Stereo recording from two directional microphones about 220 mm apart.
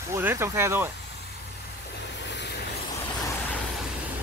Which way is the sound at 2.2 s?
55° left (ahead or behind).